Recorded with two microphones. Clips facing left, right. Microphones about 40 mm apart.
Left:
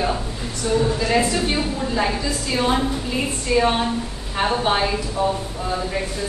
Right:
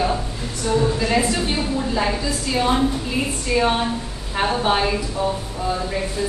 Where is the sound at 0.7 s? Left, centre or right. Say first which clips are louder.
Even; centre.